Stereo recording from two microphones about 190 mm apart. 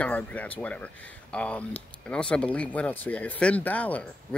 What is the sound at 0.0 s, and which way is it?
Speech, 5° left (ahead or behind).